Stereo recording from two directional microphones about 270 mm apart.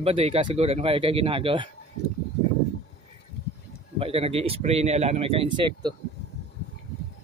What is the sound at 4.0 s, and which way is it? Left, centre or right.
Speech, right.